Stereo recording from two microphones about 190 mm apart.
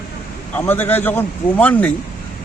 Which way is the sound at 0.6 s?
10° left (ahead or behind).